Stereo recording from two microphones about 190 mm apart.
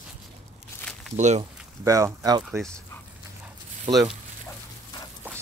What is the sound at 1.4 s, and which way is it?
Speech, 15° right (ahead or behind).